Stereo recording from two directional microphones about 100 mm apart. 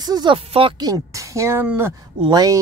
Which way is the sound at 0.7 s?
40° right (ahead or behind).